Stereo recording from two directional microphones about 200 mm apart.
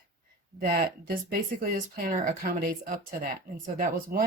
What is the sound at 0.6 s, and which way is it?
Speech, 45° right (ahead or behind).